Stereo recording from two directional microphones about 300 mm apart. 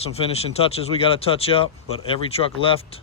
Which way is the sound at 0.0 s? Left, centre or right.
Centre.